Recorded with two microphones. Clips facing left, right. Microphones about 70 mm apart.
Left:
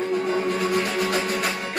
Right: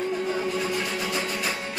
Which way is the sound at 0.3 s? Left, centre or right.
Left.